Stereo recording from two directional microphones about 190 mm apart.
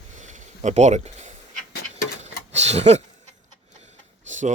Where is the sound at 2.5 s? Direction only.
35° right (ahead or behind).